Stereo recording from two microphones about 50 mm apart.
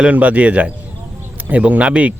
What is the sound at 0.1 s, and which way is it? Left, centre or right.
Speech, right.